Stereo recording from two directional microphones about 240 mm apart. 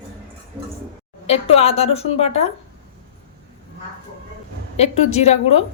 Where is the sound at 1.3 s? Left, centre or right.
Left.